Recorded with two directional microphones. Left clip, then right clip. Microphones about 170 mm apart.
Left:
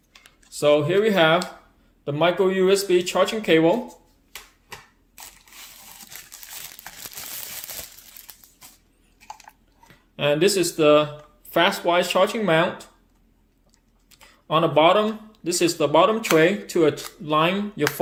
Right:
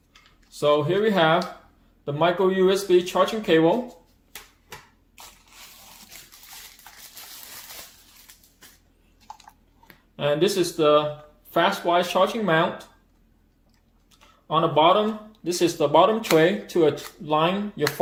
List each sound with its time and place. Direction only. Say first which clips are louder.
0.6 s speech: left 2 dB; 20° left (ahead or behind)
10.2 s speech: left 2 dB; 20° left (ahead or behind)
14.4 s speech: left 1 dB; 30° left (ahead or behind)